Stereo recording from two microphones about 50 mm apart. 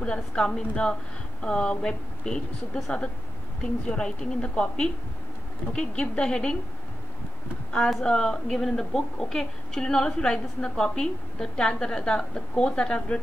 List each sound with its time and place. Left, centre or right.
0.0 s a woman's voice: centre
8.0 s a woman's voice: centre